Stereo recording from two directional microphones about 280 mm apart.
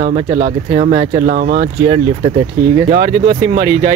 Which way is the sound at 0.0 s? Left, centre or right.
Right.